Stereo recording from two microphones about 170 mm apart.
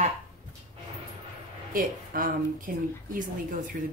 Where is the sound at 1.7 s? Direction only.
55° right (ahead or behind).